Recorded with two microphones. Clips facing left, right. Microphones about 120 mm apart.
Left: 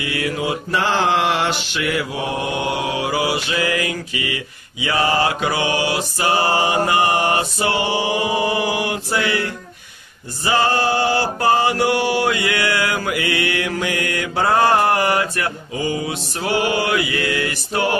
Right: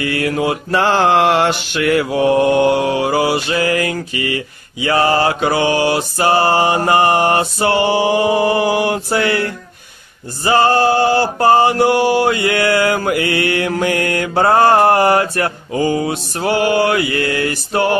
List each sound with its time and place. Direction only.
0.0 s mantra: 50° right (ahead or behind)